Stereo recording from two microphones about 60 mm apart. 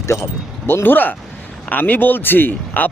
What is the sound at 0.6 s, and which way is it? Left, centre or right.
A man's voice, left.